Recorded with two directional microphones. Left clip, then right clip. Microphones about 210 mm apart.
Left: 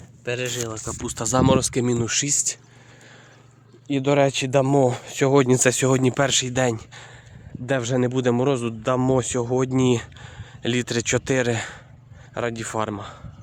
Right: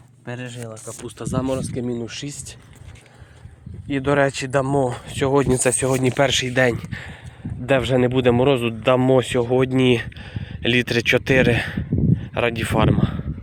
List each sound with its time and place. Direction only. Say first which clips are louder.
0.3 s speech: left 6 dB; 30° left (ahead or behind)
3.8 s speech: right 1 dB; 15° left (ahead or behind)
5.7 s speech: even; 35° left (ahead or behind)
6.0 s speech: right 2 dB; 20° left (ahead or behind)
6.2 s a man's voice: right 3 dB; 5° left (ahead or behind)